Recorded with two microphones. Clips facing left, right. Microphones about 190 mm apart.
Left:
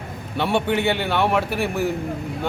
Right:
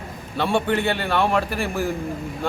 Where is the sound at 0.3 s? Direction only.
20° left (ahead or behind).